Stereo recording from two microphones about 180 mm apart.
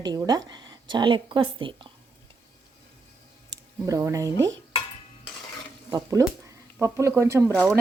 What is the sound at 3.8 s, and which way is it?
Speech, 20° right (ahead or behind).